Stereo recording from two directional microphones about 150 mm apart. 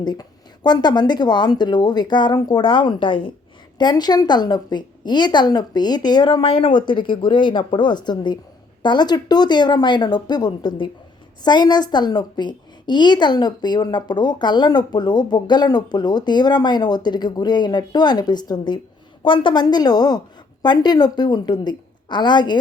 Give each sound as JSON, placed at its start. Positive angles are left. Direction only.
{"t": 0.0, "sound": "a woman's voice", "side_deg": 30}